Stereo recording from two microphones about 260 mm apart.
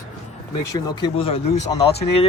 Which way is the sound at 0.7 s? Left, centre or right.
Centre.